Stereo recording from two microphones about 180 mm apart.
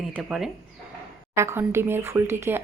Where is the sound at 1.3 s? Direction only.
15° right (ahead or behind).